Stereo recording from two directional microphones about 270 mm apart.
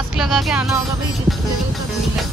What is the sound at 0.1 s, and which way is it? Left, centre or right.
Music, centre.